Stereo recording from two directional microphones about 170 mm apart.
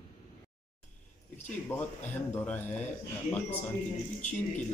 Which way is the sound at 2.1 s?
10° left (ahead or behind).